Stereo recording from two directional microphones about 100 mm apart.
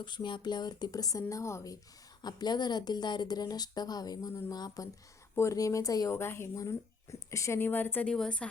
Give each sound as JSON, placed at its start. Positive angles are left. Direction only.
{"t": 0.0, "sound": "a woman's voice", "side_deg": 50}
{"t": 2.2, "sound": "a woman's voice", "side_deg": 45}
{"t": 5.3, "sound": "a woman's voice", "side_deg": 30}
{"t": 6.1, "sound": "speech", "side_deg": 25}
{"t": 8.1, "sound": "a woman's voice", "side_deg": 10}